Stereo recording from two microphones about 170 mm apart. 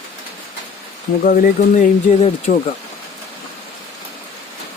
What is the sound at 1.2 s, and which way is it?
Speech, 50° left (ahead or behind).